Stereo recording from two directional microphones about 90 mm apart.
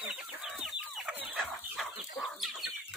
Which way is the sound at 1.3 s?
Centre (ahead or behind).